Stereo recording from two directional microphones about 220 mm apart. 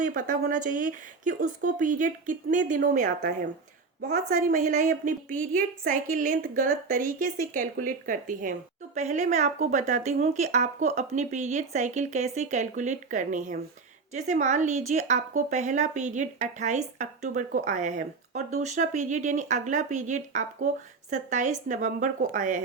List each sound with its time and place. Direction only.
0.0 s speech: 40° right (ahead or behind)